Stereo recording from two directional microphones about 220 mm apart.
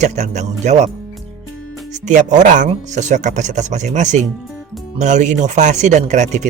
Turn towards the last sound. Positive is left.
turn(degrees=-30)  # may be behind; listen again after turning